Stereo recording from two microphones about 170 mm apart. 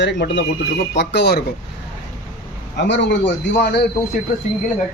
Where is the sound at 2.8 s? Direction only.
90° left.